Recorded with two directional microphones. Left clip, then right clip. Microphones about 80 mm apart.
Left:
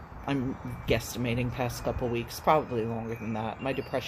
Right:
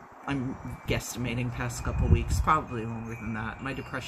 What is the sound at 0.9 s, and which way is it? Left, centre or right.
Speech, right.